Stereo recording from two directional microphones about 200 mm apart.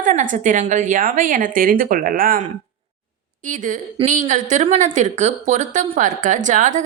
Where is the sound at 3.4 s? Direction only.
40° right (ahead or behind).